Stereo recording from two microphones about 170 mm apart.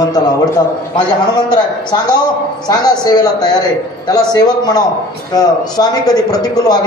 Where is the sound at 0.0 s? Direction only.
25° left (ahead or behind).